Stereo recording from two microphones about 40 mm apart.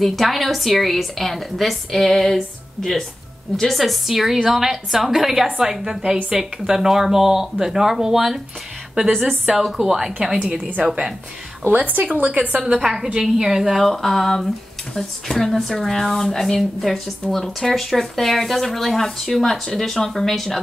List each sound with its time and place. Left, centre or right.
0.0 s a woman's voice: centre
9.6 s speech: centre
11.6 s a woman's voice: right
12.8 s a woman's voice: centre
13.7 s speech: centre